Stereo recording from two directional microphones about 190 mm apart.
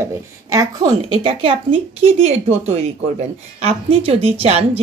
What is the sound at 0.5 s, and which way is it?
A woman's voice, 20° right (ahead or behind).